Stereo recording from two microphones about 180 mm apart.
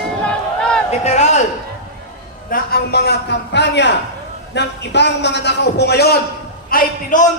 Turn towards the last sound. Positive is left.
turn(degrees=50)  # may be behind; listen again after turning